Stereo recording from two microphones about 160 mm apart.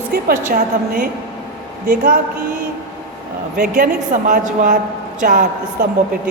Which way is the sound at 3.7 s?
55° right (ahead or behind).